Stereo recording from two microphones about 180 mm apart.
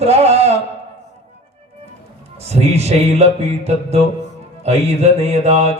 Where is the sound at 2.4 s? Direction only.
35° right (ahead or behind).